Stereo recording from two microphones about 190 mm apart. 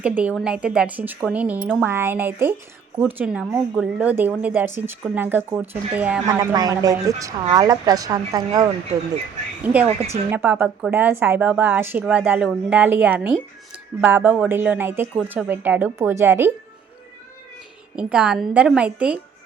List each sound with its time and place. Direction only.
0.0 s a woman's voice: 5° right (ahead or behind)
6.2 s a woman's voice: 20° right (ahead or behind)
10.3 s a woman's voice: 10° right (ahead or behind)
17.9 s a woman's voice: 5° right (ahead or behind)